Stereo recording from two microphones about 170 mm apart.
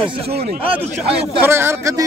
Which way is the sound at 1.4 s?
15° right (ahead or behind).